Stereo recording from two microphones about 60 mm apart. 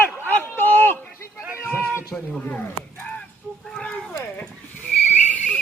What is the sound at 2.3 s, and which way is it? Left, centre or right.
Speech, left.